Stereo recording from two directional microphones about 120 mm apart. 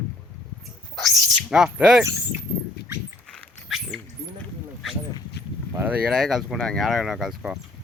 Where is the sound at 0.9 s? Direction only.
Centre (ahead or behind).